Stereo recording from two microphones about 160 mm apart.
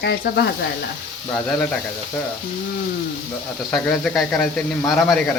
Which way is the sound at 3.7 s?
Centre (ahead or behind).